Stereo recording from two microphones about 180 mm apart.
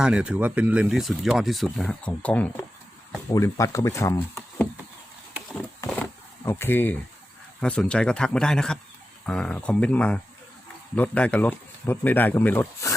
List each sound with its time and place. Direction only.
0.0 s speech: 5° right (ahead or behind); by 4.7 s 10° left (ahead or behind)
5.5 s a sound: 10° left (ahead or behind)
7.6 s speech: 5° left (ahead or behind)